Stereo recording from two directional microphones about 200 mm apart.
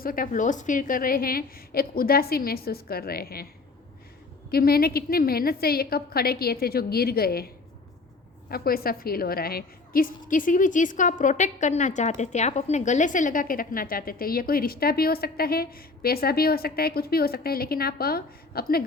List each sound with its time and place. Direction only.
0.0 s a woman's voice: 45° left (ahead or behind)
4.5 s a woman's voice: 50° left (ahead or behind)